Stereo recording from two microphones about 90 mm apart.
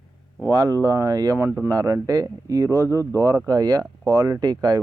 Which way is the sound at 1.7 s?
45° right (ahead or behind).